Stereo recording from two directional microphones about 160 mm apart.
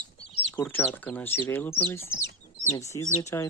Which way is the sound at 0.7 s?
10° left (ahead or behind).